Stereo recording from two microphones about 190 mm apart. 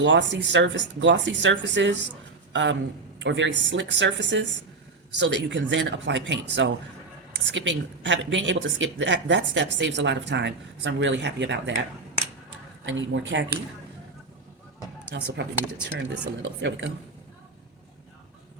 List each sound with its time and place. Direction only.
0.0 s a man's voice: 70° right (ahead or behind)
12.8 s speech: 80° right
15.1 s speech: 70° right (ahead or behind)
15.9 s speech: 85° right